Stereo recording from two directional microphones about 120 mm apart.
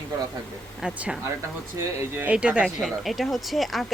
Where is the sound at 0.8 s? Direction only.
Centre (ahead or behind).